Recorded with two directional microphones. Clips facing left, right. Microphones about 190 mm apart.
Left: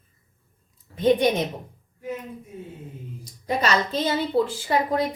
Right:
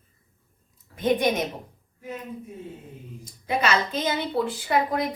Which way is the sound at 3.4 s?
40° left (ahead or behind).